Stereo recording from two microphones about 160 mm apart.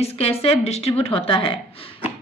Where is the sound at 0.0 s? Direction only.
40° left (ahead or behind).